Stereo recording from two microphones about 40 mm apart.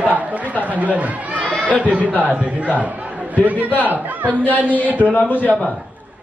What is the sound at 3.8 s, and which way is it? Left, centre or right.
Speech, right.